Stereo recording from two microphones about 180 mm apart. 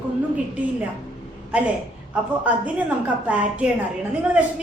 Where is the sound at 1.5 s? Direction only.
5° right (ahead or behind).